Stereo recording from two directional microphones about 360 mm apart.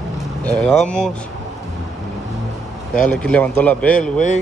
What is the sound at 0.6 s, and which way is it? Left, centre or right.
Speech, centre.